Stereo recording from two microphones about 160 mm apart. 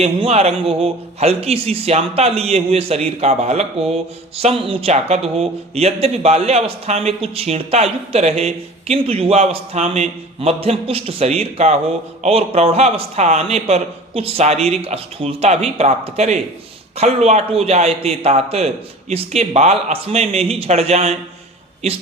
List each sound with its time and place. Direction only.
0.0 s speech: 40° right (ahead or behind)